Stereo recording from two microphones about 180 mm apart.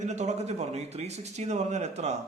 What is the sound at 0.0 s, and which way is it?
Speech, 40° right (ahead or behind).